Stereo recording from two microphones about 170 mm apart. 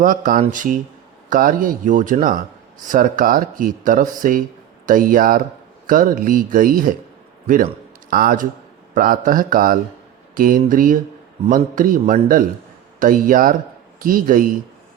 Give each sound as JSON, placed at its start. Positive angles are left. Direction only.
{"t": 0.0, "sound": "a man's voice", "side_deg": -55}